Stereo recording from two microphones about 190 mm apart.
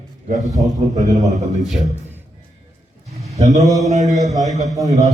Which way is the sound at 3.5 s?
20° right (ahead or behind).